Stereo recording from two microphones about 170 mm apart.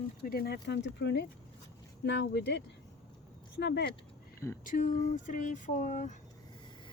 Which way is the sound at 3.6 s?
90° left.